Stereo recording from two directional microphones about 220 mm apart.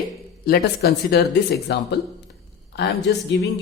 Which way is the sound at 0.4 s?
45° left (ahead or behind).